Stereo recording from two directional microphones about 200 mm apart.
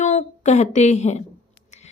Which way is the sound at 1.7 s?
35° left (ahead or behind).